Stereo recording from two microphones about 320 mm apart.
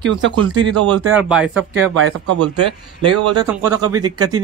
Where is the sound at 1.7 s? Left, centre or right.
Right.